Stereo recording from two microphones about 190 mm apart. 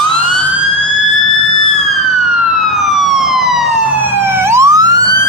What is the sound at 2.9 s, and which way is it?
Emergency vehicle, centre (ahead or behind).